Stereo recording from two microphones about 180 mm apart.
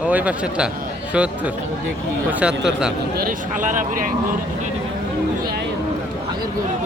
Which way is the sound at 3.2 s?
50° right (ahead or behind).